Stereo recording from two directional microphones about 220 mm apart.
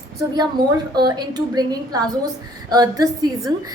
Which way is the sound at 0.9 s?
20° right (ahead or behind).